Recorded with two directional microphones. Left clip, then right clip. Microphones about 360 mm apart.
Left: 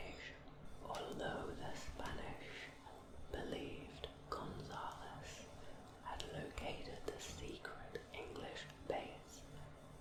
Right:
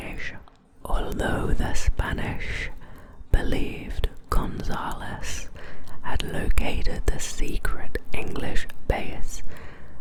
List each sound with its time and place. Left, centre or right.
0.9 s whispering: right
6.1 s speech: right